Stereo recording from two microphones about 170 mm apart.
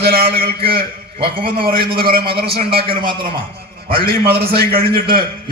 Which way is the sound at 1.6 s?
60° right (ahead or behind).